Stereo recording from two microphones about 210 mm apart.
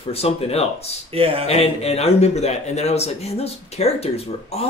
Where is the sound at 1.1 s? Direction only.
25° right (ahead or behind).